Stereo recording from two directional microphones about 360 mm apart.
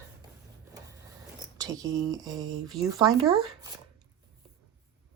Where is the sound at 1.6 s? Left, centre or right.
Centre.